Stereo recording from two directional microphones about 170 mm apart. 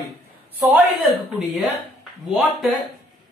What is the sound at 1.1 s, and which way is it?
Speech, centre (ahead or behind).